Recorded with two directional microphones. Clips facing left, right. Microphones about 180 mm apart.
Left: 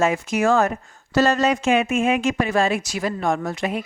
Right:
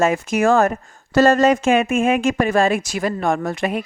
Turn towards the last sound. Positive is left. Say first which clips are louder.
# right 3 dB
turn(degrees=-55)  # may be behind; listen again after turning